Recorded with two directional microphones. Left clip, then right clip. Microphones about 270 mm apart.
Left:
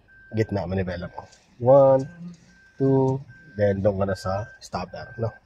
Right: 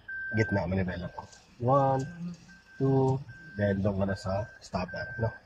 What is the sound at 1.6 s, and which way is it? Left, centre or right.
Speech, left.